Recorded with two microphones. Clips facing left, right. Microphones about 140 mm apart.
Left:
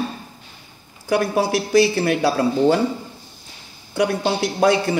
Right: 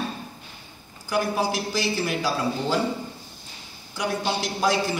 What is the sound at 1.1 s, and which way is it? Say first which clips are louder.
Speech: left 6 dB; 65° left (ahead or behind).